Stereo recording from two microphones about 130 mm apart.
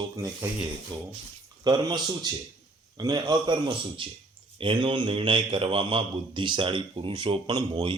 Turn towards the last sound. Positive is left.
turn(degrees=-30)  # may be behind; listen again after turning